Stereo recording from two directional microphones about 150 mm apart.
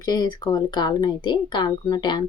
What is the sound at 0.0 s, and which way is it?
Speech, 25° left (ahead or behind).